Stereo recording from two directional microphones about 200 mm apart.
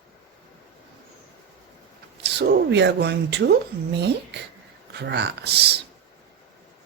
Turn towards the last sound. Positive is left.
turn(degrees=-55)  # may be behind; listen again after turning